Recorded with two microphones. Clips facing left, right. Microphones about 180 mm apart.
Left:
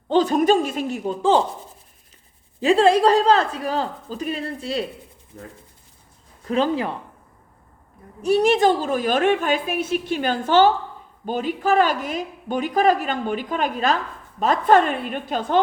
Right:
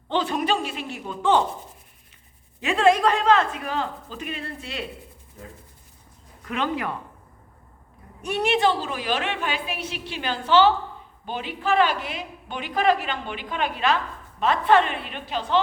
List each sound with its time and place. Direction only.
0.1 s speech: 40° left (ahead or behind)
2.6 s speech: 35° left (ahead or behind)
6.4 s speech: 30° left (ahead or behind)
8.2 s speech: 40° left (ahead or behind)